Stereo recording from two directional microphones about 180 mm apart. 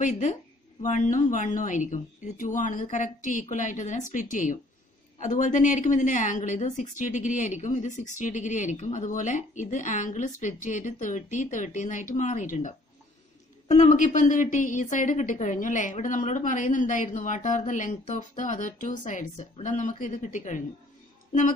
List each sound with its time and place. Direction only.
0.0 s a woman's voice: 40° left (ahead or behind)